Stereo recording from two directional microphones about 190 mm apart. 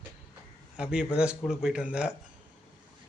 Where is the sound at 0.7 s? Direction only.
5° right (ahead or behind).